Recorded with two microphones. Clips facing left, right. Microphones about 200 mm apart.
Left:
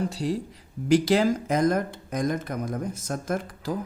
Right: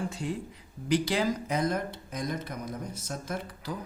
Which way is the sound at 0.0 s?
35° left (ahead or behind).